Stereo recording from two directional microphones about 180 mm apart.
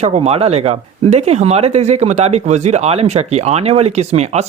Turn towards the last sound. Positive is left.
turn(degrees=-35)  # may be behind; listen again after turning